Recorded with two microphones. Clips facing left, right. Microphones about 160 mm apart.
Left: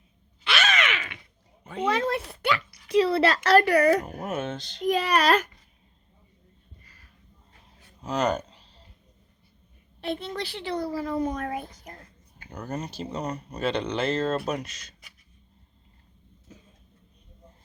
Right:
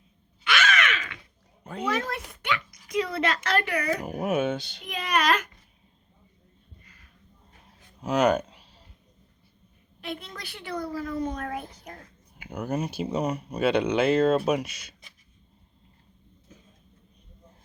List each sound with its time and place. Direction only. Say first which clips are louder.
0.4 s a sound: right 1 dB; 20° left (ahead or behind)
1.9 s speech: left 4 dB; 30° left (ahead or behind)
4.1 s speech: right 5 dB; 15° right (ahead or behind)
4.9 s speech: left 4 dB; 35° left (ahead or behind)
8.0 s speech: right 4 dB; 5° right (ahead or behind)
10.0 s a woman's voice: left 6 dB; 30° left (ahead or behind)
12.4 s speech: right 4 dB; 10° right (ahead or behind)